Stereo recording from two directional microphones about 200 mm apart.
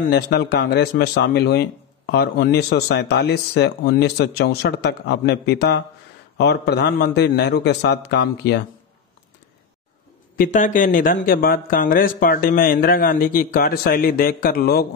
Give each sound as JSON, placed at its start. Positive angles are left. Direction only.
{"t": 0.1, "sound": "speech", "side_deg": 55}
{"t": 10.3, "sound": "speech", "side_deg": 45}